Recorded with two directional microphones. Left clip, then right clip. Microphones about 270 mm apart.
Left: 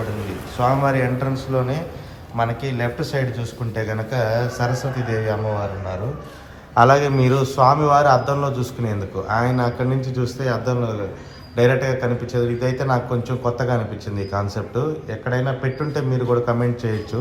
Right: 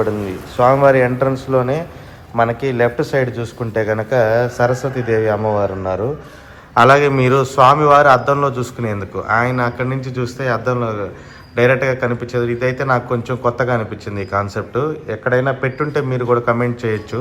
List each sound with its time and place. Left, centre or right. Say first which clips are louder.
0.3 s speech: right 6 dB; centre
4.9 s speech: right 8 dB; left
5.2 s a man's voice: right 6 dB; centre